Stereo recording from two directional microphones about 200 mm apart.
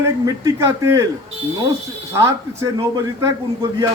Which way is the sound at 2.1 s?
15° right (ahead or behind).